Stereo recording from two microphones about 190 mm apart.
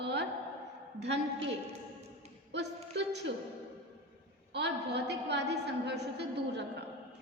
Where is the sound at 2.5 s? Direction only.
65° right (ahead or behind).